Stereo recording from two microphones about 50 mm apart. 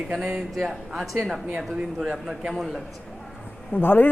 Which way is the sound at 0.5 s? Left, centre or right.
Centre.